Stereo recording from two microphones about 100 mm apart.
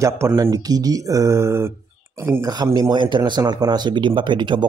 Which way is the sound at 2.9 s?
50° right (ahead or behind).